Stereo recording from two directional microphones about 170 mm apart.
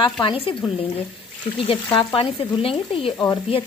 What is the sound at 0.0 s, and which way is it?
Speech, 30° left (ahead or behind).